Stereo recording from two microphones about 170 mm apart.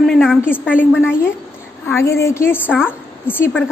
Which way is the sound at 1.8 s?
15° left (ahead or behind).